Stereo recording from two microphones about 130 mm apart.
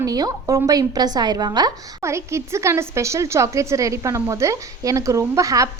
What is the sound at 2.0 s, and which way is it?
A woman's voice, 20° right (ahead or behind).